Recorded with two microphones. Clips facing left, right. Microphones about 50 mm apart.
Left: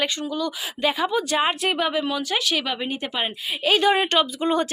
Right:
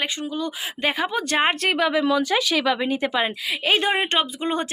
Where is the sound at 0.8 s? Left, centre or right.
Right.